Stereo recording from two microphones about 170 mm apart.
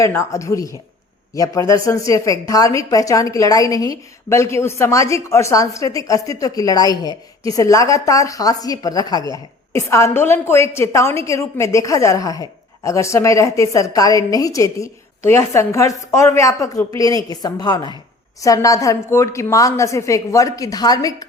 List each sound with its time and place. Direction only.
0.2 s a woman's voice: 20° left (ahead or behind)